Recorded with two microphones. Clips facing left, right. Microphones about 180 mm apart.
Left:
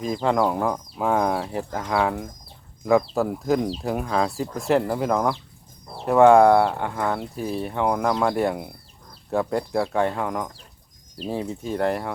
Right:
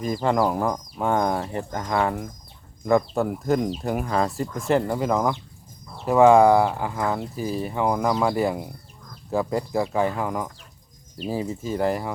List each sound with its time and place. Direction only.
0.0 s speech: centre (ahead or behind)